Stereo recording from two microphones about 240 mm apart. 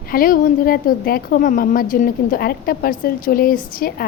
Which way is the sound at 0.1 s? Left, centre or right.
Left.